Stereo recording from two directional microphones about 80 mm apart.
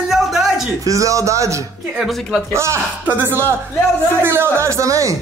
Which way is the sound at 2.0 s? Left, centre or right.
Centre.